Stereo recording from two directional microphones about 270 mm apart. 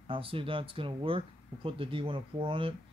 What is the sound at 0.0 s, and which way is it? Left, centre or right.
Speech, centre.